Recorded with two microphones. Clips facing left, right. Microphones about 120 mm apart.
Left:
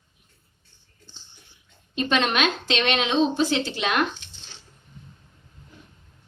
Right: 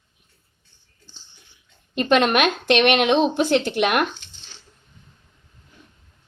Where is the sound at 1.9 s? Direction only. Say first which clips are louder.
Right 5 dB; 50° right (ahead or behind).